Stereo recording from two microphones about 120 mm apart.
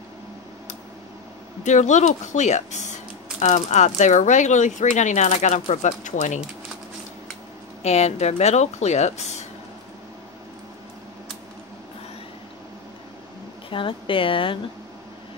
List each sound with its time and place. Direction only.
1.6 s speech: 85° left
7.8 s speech: 65° left (ahead or behind)
13.7 s speech: 45° left (ahead or behind)